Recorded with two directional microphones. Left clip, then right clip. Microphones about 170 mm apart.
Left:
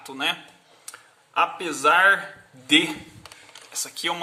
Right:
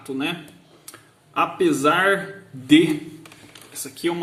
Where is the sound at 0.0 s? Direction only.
20° left (ahead or behind).